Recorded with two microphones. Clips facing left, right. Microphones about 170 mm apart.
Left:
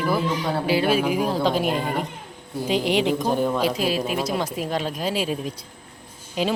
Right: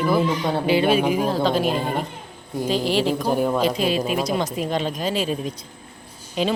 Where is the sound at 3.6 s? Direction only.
5° left (ahead or behind).